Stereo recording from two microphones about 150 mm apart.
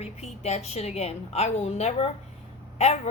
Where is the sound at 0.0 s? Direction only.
45° left (ahead or behind).